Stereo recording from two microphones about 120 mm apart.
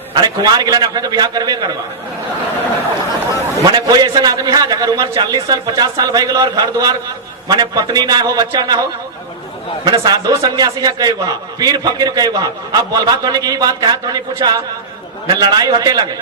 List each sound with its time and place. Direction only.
0.1 s a man's voice: 35° right (ahead or behind)
3.7 s a man's voice: 35° right (ahead or behind)
9.8 s a man's voice: 35° right (ahead or behind)